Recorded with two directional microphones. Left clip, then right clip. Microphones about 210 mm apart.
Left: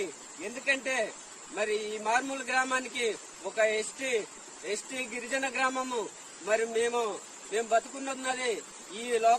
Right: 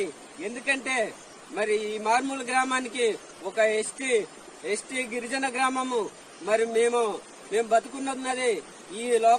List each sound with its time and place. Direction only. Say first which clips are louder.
0.0 s a man's voice: right 5 dB; 20° left (ahead or behind)